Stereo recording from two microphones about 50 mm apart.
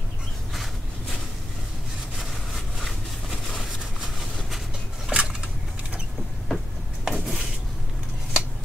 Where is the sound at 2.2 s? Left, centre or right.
Centre.